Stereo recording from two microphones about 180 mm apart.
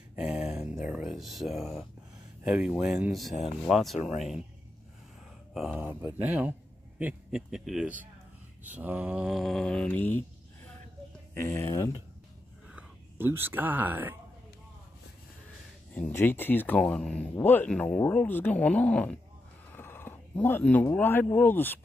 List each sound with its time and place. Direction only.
0.1 s a sound: 10° right (ahead or behind)
2.4 s mantra: 5° right (ahead or behind)
5.5 s speech: 5° right (ahead or behind)
7.0 s mantra: 5° right (ahead or behind)
11.3 s speech: 15° left (ahead or behind)
12.6 s speech: 10° right (ahead or behind)
15.9 s speech: 10° left (ahead or behind)
19.7 s a sound: 10° left (ahead or behind)
20.9 s speech: 10° left (ahead or behind)